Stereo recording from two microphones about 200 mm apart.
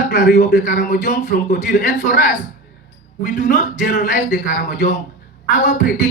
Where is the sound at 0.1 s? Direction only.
40° left (ahead or behind).